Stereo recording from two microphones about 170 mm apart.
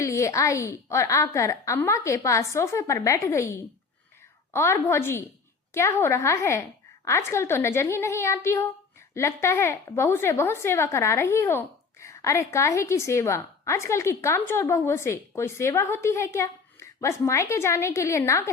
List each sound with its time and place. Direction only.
0.0 s a woman's voice: 15° left (ahead or behind)